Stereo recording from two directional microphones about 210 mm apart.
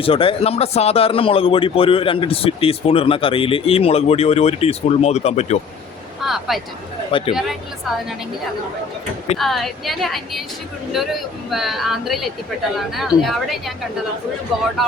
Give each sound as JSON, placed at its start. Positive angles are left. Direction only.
{"t": 0.0, "sound": "a man's voice", "side_deg": 25}
{"t": 6.2, "sound": "a sound", "side_deg": 0}
{"t": 7.1, "sound": "a man's voice", "side_deg": 25}
{"t": 9.4, "sound": "speech", "side_deg": 0}